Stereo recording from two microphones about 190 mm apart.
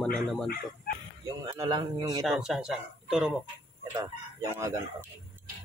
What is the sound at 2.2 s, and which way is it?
Speech, 5° right (ahead or behind).